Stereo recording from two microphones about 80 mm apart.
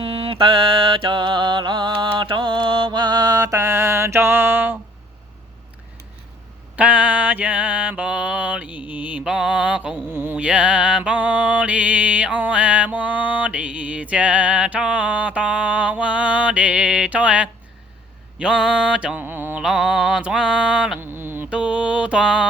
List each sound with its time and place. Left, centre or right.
0.3 s mantra: right
3.6 s mantra: right
6.7 s mantra: centre
10.1 s mantra: right
10.3 s mantra: centre
19.2 s mantra: right
19.6 s mantra: centre
21.0 s mantra: right
21.5 s mantra: centre